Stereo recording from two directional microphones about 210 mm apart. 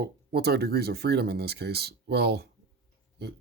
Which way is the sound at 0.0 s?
50° right (ahead or behind).